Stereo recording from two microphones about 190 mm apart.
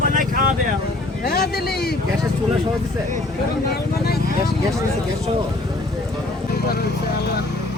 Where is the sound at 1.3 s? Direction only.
55° left (ahead or behind).